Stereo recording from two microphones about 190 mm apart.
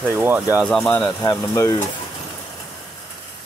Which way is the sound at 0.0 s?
10° right (ahead or behind).